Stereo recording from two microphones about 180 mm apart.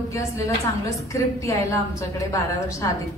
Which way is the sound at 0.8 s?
15° left (ahead or behind).